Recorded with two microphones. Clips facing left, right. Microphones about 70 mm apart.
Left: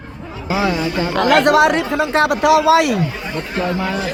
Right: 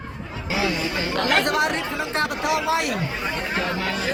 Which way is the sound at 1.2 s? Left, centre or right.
Left.